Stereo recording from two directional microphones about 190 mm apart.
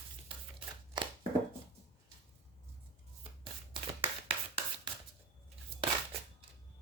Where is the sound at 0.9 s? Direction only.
25° right (ahead or behind).